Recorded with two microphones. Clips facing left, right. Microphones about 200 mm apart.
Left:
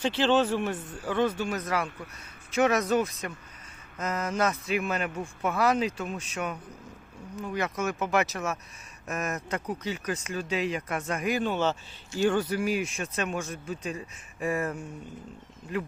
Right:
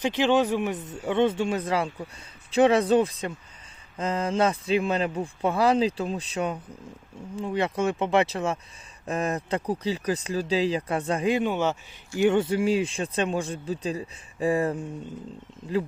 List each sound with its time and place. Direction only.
0.0 s a man's voice: 15° right (ahead or behind)
11.4 s speech: 15° right (ahead or behind); by 14.8 s 30° right (ahead or behind)